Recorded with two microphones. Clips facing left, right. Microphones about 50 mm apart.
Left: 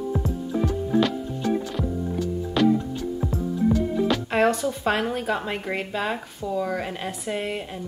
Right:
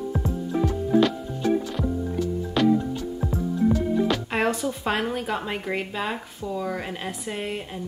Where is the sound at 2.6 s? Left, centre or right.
Centre.